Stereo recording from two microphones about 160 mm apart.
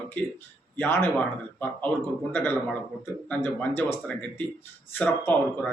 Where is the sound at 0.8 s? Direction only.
15° left (ahead or behind).